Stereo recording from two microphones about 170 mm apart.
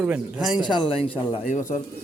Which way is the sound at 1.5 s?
45° left (ahead or behind).